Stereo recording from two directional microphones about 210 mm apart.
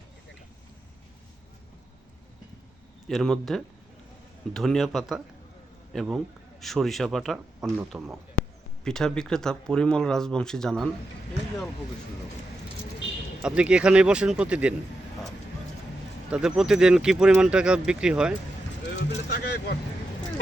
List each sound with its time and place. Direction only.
3.1 s a man's voice: centre (ahead or behind)
13.4 s speech: 5° right (ahead or behind)
16.3 s speech: 5° right (ahead or behind)
18.9 s vehicle: 50° left (ahead or behind)